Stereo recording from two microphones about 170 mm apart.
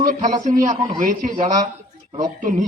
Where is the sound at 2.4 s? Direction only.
50° right (ahead or behind).